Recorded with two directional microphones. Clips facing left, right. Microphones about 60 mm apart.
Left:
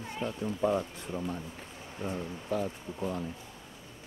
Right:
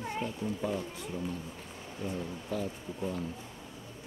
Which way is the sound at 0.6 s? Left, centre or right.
Left.